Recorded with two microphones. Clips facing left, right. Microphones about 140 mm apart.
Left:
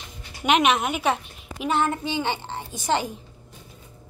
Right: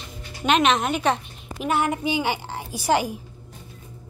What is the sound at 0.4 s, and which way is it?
A woman's voice, 15° left (ahead or behind).